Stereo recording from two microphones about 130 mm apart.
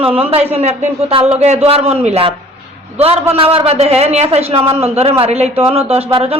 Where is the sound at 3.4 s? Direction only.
45° right (ahead or behind).